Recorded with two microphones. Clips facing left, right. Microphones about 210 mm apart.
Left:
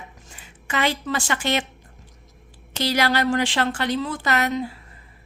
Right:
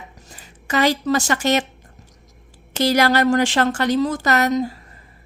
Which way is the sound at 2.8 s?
45° right (ahead or behind).